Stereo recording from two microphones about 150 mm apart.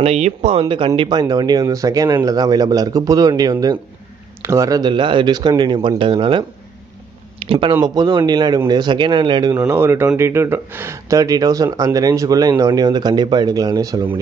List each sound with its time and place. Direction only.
0.0 s speech: 45° right (ahead or behind)
7.3 s a sound: 35° right (ahead or behind)
7.8 s speech: 30° right (ahead or behind)